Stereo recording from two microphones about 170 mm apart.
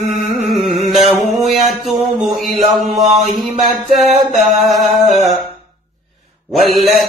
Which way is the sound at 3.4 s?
30° right (ahead or behind).